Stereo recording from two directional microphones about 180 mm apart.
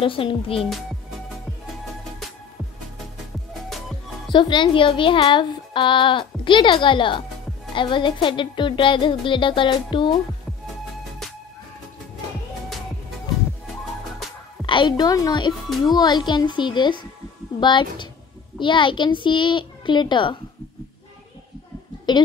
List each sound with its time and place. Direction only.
0.0 s speech: 30° left (ahead or behind)
4.3 s speech: 25° left (ahead or behind)
14.7 s speech: 25° left (ahead or behind)
22.1 s speech: 25° left (ahead or behind)